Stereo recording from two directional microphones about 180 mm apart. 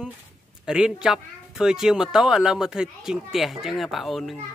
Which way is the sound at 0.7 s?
5° right (ahead or behind).